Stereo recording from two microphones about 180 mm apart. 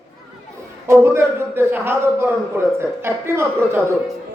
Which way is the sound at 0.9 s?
15° right (ahead or behind).